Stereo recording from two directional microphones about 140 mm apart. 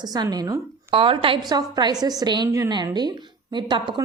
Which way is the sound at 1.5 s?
30° right (ahead or behind).